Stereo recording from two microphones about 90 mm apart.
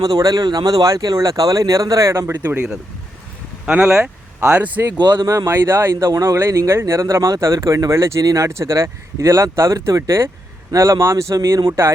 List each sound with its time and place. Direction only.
0.2 s speech: 45° right (ahead or behind); by 2.6 s 20° right (ahead or behind)
3.7 s speech: 10° right (ahead or behind)
4.9 s speech: 55° right (ahead or behind)
5.2 s speech: 35° right (ahead or behind)
6.1 s speech: 35° right (ahead or behind)